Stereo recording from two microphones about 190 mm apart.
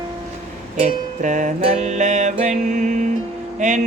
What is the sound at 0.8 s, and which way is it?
Music, 40° right (ahead or behind).